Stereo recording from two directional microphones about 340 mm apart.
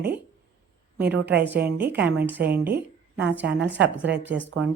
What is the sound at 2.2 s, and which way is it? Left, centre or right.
Speech, centre.